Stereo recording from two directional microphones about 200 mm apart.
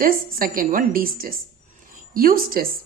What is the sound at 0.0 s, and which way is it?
A woman's voice, 45° right (ahead or behind).